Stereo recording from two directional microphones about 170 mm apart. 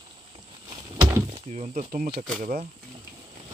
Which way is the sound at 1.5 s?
40° right (ahead or behind).